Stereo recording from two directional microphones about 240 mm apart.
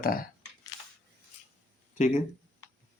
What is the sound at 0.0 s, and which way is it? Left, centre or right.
Speech, left.